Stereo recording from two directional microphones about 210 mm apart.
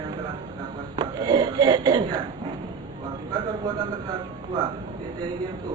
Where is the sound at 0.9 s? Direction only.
20° right (ahead or behind).